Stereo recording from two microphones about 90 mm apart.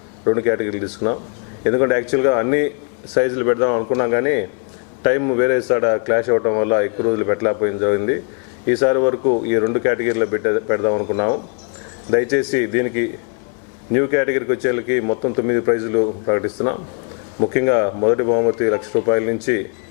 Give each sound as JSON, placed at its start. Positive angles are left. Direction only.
{"t": 0.3, "sound": "a man's voice", "side_deg": 20}